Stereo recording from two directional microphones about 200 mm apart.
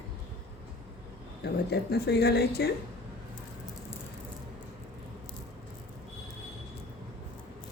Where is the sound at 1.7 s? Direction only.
55° left (ahead or behind).